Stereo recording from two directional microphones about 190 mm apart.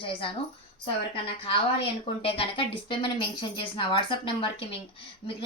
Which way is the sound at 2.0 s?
30° left (ahead or behind).